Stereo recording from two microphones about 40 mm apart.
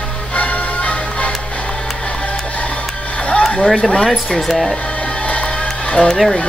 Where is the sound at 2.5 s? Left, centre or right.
Left.